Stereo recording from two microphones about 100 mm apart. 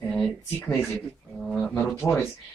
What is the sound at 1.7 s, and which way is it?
Speech, 20° left (ahead or behind).